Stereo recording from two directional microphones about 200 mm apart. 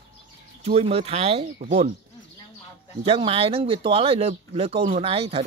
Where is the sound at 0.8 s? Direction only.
30° right (ahead or behind).